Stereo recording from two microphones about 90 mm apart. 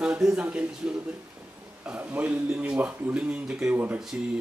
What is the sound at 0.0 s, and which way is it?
Speech, 10° right (ahead or behind).